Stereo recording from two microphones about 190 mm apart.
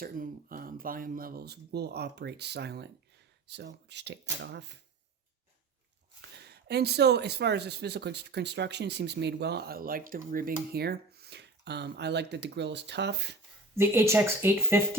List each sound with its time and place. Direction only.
0.0 s speech: 50° right (ahead or behind); by 4.8 s 65° right (ahead or behind)
6.3 s speech: 60° right (ahead or behind)
13.7 s speech: 15° right (ahead or behind)